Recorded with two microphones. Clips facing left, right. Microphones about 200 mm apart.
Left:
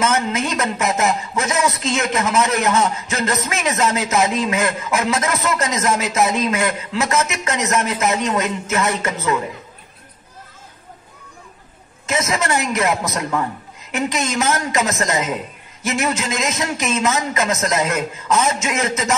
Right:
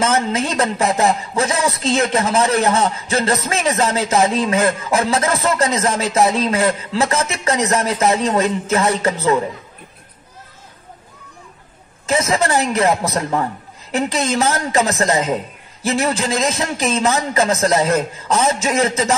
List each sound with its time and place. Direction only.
0.0 s a man's voice: 30° right (ahead or behind)
12.1 s a man's voice: 30° right (ahead or behind)